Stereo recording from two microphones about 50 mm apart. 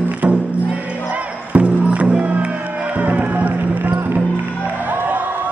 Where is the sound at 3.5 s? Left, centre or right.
Right.